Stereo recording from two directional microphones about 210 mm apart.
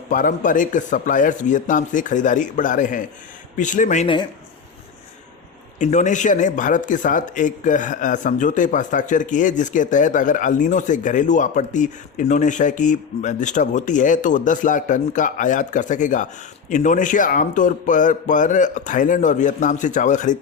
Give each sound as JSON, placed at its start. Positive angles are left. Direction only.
{"t": 0.1, "sound": "speech", "side_deg": 40}
{"t": 5.8, "sound": "speech", "side_deg": 35}